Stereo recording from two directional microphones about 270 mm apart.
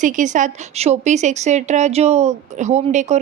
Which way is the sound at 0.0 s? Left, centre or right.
Right.